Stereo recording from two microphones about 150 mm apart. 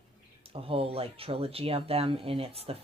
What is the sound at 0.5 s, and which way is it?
Speech, 40° right (ahead or behind).